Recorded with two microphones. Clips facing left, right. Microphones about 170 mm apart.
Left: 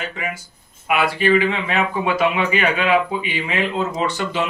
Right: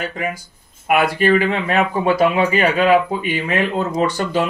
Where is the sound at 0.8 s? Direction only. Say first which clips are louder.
Right 3 dB; 45° right (ahead or behind).